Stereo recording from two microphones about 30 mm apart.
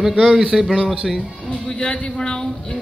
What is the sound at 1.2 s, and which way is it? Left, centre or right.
A man's voice, left.